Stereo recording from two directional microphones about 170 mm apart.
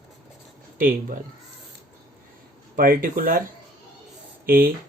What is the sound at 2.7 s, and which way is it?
Speech, 55° right (ahead or behind).